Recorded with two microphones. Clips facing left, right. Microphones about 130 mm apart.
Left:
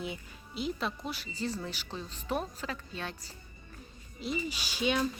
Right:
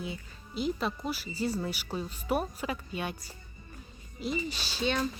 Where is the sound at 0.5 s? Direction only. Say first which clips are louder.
Right 3 dB; centre (ahead or behind).